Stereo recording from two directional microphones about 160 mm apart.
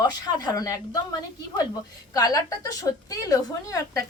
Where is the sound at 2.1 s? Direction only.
20° left (ahead or behind).